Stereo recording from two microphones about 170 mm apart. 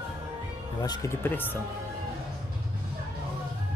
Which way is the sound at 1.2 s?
10° left (ahead or behind).